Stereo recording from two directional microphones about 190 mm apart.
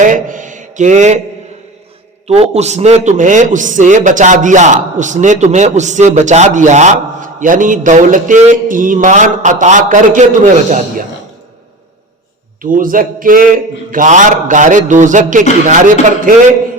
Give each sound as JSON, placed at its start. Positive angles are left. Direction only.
{"t": 0.0, "sound": "mantra", "side_deg": -45}
{"t": 2.2, "sound": "a man's voice", "side_deg": -35}
{"t": 12.6, "sound": "a man's voice", "side_deg": -45}